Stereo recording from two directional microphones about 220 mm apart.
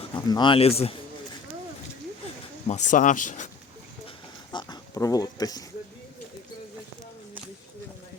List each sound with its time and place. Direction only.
0.3 s speech: 20° left (ahead or behind)
2.6 s speech: 35° left (ahead or behind)
4.5 s speech: 15° left (ahead or behind)